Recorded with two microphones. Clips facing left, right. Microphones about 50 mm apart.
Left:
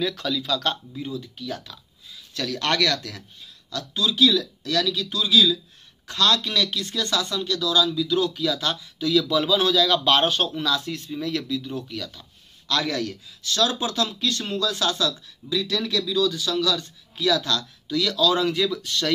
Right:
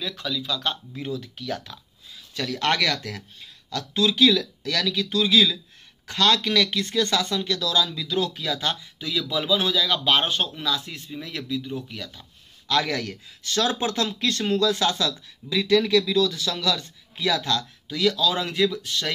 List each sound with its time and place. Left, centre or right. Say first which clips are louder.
0.1 s speech: left 3 dB; centre
1.2 s speech: right 1 dB; right
2.3 s speech: even; right
3.7 s a man's voice: right 2 dB; right; by 19.1 s centre